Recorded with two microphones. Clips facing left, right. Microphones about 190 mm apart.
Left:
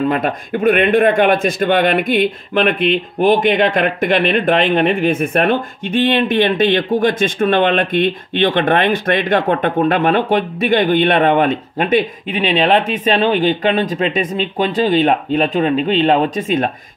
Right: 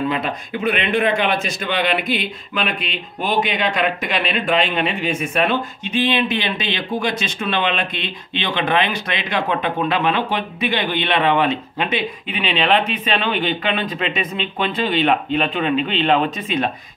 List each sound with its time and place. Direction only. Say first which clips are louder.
0.1 s a man's voice: left 5 dB; 50° left (ahead or behind)